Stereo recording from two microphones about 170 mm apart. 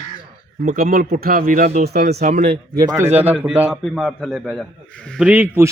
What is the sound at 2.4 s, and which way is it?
Speech, 70° right (ahead or behind).